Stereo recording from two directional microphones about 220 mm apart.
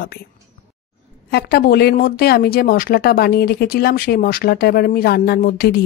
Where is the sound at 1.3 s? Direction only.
45° left (ahead or behind).